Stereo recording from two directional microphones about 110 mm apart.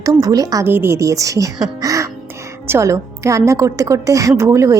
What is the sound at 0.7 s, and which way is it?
Speech, 20° right (ahead or behind).